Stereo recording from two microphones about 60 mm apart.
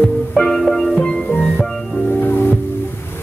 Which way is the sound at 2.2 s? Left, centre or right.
Left.